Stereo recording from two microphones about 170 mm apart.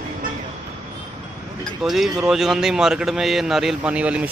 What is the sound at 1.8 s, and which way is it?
A man's voice, centre (ahead or behind).